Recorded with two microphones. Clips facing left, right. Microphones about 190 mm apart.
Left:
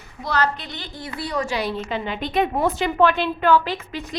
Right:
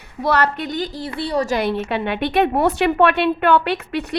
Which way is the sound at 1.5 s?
60° right (ahead or behind).